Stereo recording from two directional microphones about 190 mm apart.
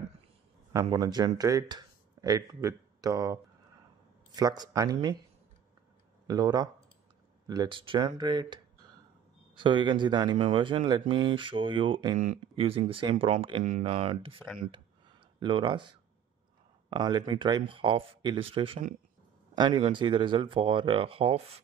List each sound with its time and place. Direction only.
0.7 s speech: 20° right (ahead or behind)
4.4 s speech: 20° right (ahead or behind)
6.2 s speech: 20° right (ahead or behind)
9.6 s speech: 25° right (ahead or behind)
12.2 s speech: 35° right (ahead or behind)
14.7 s a sound: 25° right (ahead or behind)
16.9 s speech: 20° right (ahead or behind)